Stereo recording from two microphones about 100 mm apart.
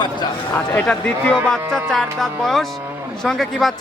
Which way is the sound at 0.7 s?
10° left (ahead or behind).